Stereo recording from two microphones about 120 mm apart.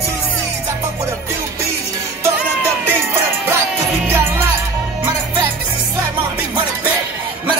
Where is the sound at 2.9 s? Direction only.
20° right (ahead or behind).